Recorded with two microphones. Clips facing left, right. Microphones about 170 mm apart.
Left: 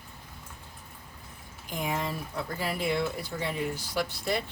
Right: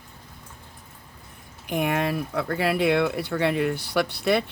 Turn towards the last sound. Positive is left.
turn(degrees=-70)  # may be behind; listen again after turning